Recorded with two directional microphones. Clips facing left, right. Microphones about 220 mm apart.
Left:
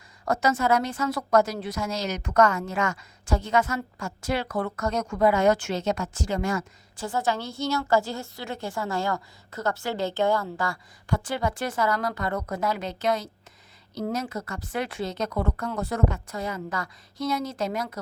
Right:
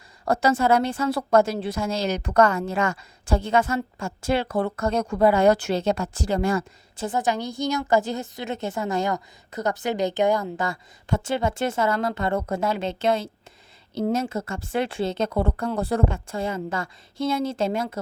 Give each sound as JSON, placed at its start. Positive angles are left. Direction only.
{"t": 0.3, "sound": "a woman's voice", "side_deg": -30}
{"t": 7.0, "sound": "a woman's voice", "side_deg": -20}